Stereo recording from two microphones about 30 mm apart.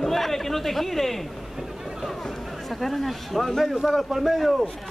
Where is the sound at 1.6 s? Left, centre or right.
Centre.